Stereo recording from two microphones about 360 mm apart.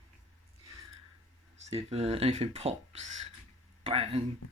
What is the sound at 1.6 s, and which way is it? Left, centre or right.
Speech, centre.